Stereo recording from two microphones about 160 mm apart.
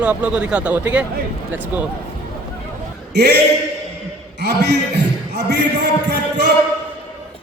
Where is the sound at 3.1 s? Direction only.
90° right.